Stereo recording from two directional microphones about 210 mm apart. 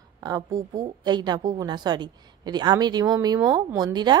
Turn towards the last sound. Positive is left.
turn(degrees=-20)  # may be behind; listen again after turning